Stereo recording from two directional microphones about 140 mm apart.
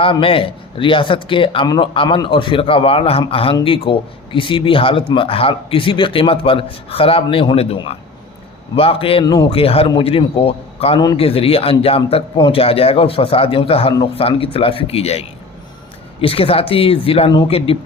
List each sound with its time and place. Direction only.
0.0 s a man's voice: 40° left (ahead or behind)
1.6 s a man's voice: 25° left (ahead or behind)
9.2 s speech: 30° left (ahead or behind)
9.5 s a man's voice: 45° left (ahead or behind)